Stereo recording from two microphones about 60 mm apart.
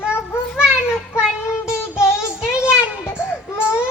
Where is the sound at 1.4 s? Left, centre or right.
Left.